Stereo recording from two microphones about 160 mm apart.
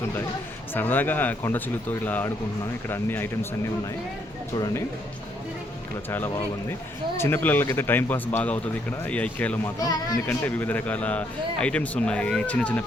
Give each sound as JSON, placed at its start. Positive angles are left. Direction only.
{"t": 0.7, "sound": "speech", "side_deg": 10}
{"t": 4.5, "sound": "speech", "side_deg": 25}
{"t": 6.1, "sound": "speech", "side_deg": 15}